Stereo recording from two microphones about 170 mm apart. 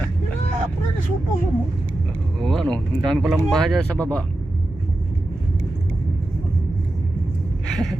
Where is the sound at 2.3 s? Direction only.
Centre (ahead or behind).